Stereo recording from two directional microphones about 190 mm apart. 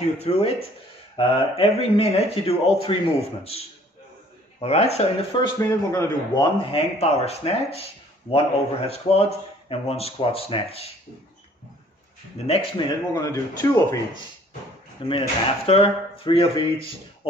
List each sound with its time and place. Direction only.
0.2 s speech: 35° left (ahead or behind)
5.6 s speech: 15° left (ahead or behind); by 10.9 s 30° left (ahead or behind)
12.4 s speech: 20° left (ahead or behind)
15.0 s speech: 30° left (ahead or behind)